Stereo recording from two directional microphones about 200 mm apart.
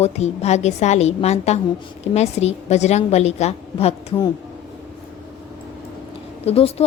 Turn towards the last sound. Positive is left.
turn(degrees=30)  # may be behind; listen again after turning